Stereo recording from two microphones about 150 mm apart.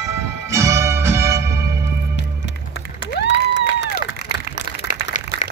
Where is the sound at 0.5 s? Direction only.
20° right (ahead or behind).